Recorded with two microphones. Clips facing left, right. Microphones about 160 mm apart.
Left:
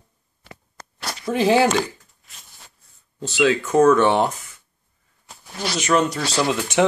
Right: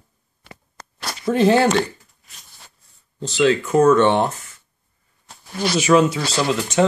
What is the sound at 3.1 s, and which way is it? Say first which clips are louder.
Speech: right 2 dB; 10° left (ahead or behind).